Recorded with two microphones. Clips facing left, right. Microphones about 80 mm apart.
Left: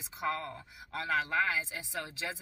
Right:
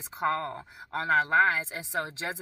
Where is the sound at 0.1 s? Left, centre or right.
Right.